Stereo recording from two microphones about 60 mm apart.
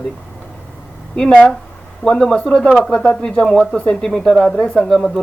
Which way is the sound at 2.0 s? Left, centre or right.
Centre.